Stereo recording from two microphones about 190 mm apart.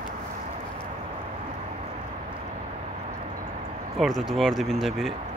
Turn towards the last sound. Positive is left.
turn(degrees=0)  # may be behind; listen again after turning